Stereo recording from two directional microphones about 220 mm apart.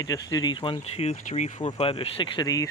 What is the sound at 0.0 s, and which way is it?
Speech, 15° left (ahead or behind).